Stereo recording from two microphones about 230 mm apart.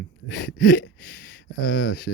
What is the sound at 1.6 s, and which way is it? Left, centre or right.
Speech, left.